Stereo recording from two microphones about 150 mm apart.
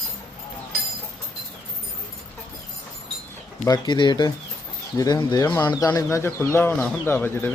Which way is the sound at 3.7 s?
30° left (ahead or behind).